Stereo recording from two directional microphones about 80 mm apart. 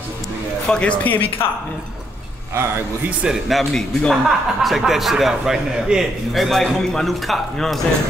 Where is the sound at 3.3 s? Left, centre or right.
Centre.